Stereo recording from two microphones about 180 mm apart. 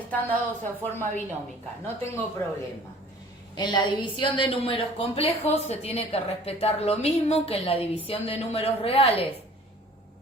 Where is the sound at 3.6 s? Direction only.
25° left (ahead or behind).